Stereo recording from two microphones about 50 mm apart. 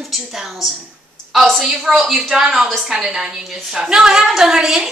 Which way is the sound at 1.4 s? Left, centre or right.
Centre.